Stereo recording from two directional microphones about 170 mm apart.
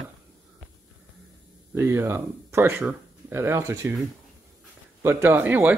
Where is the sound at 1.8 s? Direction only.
15° right (ahead or behind).